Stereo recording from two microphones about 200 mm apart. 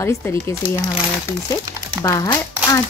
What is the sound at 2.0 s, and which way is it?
Speech, 20° left (ahead or behind).